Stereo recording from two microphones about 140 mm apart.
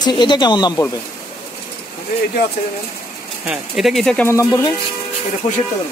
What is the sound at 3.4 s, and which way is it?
Speech, centre (ahead or behind).